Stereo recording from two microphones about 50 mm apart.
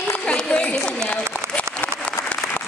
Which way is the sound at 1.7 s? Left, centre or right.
Left.